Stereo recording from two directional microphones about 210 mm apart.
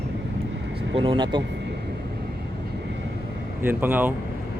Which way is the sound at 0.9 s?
25° right (ahead or behind).